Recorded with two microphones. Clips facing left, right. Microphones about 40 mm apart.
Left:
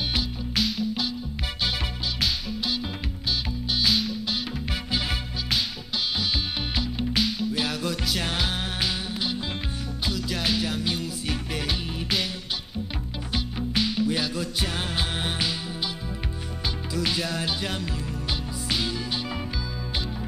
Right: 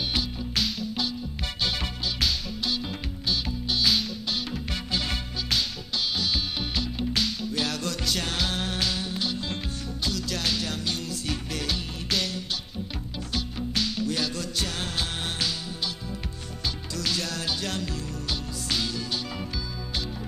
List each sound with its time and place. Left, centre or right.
0.1 s music: centre
3.8 s music: centre
16.9 s music: centre